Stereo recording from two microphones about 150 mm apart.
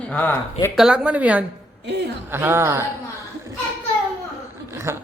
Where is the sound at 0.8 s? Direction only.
5° right (ahead or behind).